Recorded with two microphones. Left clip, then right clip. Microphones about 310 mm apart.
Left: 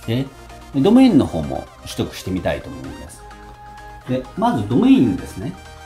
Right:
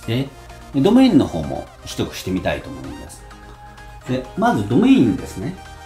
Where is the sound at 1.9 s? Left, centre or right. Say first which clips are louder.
Even; centre.